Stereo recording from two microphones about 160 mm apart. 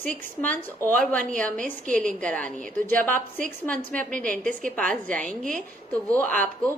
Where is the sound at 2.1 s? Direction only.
5° left (ahead or behind).